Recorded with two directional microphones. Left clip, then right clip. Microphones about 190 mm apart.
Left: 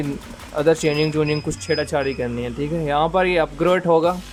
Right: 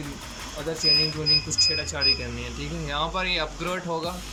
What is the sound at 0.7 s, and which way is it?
Speech, 55° left (ahead or behind).